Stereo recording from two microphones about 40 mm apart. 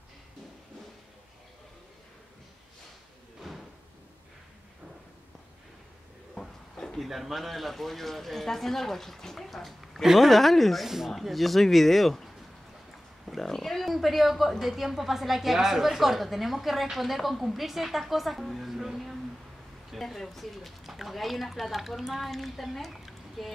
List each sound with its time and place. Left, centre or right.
3.4 s slam: centre
6.3 s a sound: centre
7.0 s a woman's voice: centre
13.2 s wild animals: centre
13.5 s roaring cats: centre
14.6 s a woman's voice: centre